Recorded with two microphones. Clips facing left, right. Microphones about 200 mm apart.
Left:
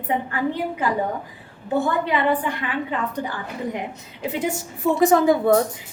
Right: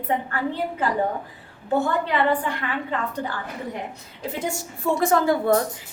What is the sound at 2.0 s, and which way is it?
Speech, 15° left (ahead or behind).